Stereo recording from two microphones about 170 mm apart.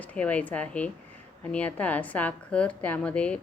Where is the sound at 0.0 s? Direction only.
10° left (ahead or behind).